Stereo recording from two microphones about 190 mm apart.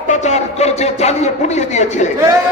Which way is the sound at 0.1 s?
40° left (ahead or behind).